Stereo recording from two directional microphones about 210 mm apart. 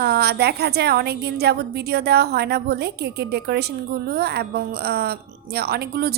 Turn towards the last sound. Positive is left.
turn(degrees=-50)  # may be behind; listen again after turning